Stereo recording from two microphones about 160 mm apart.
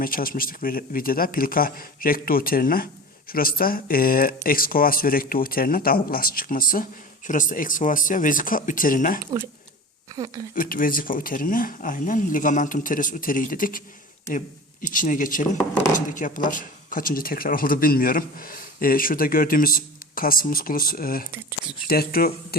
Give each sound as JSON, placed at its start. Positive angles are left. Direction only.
{"t": 0.0, "sound": "speech", "side_deg": 65}
{"t": 10.2, "sound": "speech", "side_deg": -25}
{"t": 10.5, "sound": "speech", "side_deg": 60}